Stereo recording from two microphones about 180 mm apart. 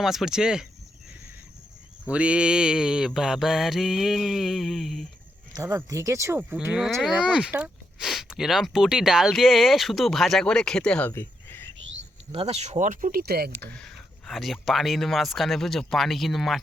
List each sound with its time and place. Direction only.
0.0 s speech: centre (ahead or behind)
2.0 s speech: 5° right (ahead or behind)
5.5 s speech: 20° right (ahead or behind)
6.7 s speech: centre (ahead or behind)
11.1 s a sound: 10° left (ahead or behind)
11.8 s a sound: 90° right
12.3 s speech: 35° right (ahead or behind); by 13.5 s 55° right (ahead or behind)
13.7 s speech: centre (ahead or behind)